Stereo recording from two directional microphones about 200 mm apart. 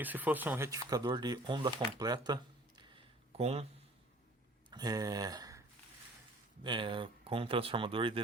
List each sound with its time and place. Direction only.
0.0 s speech: 10° right (ahead or behind); by 3.7 s 30° right (ahead or behind)
4.7 s speech: 20° right (ahead or behind)